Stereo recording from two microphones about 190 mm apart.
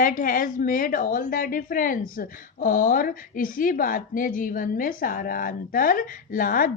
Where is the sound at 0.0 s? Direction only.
50° left (ahead or behind).